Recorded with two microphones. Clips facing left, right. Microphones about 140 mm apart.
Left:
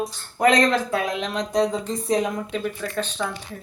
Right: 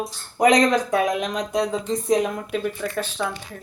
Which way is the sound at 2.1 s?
Centre (ahead or behind).